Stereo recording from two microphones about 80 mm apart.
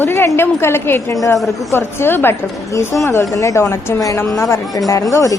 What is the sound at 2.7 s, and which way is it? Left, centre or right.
A woman's voice, left.